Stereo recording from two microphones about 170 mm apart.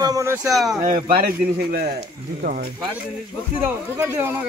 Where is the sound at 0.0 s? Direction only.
20° right (ahead or behind).